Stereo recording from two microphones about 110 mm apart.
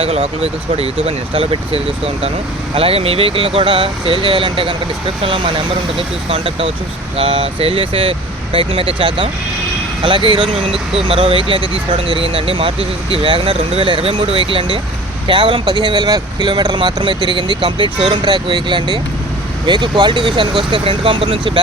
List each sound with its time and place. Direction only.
0.0 s speech: 65° right (ahead or behind)